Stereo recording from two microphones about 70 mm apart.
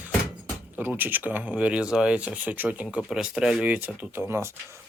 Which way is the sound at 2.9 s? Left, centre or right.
Centre.